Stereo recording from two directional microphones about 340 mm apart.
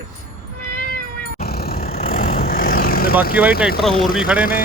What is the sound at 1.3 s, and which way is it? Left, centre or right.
Vehicle, left.